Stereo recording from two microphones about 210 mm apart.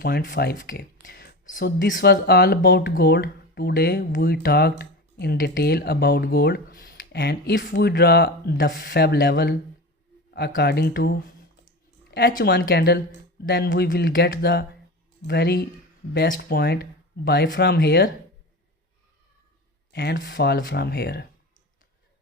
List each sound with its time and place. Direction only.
0.0 s speech: 50° left (ahead or behind)
12.1 s speech: 45° left (ahead or behind)
19.9 s speech: 50° left (ahead or behind)